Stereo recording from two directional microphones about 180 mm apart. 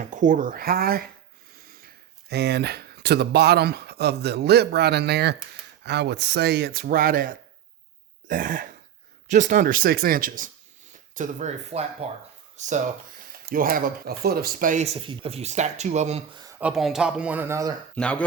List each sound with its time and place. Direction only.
0.1 s speech: 45° right (ahead or behind)
1.5 s snort: 55° right (ahead or behind)
2.3 s speech: 65° right (ahead or behind); by 12.8 s 40° right (ahead or behind)
13.4 s speech: 50° right (ahead or behind)
14.9 s speech: 30° right (ahead or behind)
16.6 s speech: 5° right (ahead or behind)
17.9 s speech: 5° left (ahead or behind)